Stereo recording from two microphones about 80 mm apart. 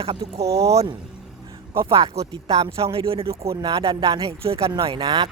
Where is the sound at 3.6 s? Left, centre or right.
Right.